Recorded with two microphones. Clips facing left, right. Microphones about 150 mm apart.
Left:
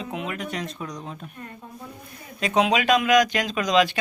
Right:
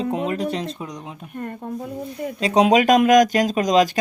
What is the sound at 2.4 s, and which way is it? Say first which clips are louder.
Speech: right 5 dB; 35° right (ahead or behind).